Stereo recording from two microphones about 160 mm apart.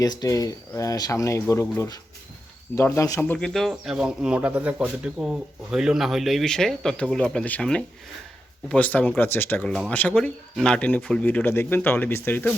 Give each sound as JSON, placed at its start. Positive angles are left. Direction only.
{"t": 0.0, "sound": "speech", "side_deg": 25}
{"t": 2.7, "sound": "speech", "side_deg": 15}